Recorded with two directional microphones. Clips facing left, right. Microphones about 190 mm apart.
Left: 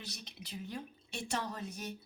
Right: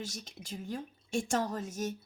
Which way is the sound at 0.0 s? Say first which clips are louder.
Right 6 dB; 45° right (ahead or behind).